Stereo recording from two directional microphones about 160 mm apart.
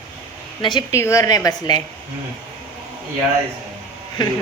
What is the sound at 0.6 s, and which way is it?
A man's voice, 30° left (ahead or behind).